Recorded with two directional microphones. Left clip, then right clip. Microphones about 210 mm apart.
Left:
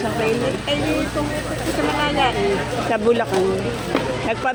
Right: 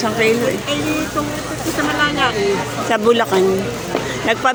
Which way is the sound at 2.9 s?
10° right (ahead or behind).